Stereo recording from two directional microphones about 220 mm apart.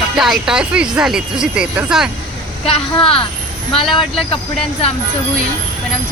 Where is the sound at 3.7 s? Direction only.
20° left (ahead or behind).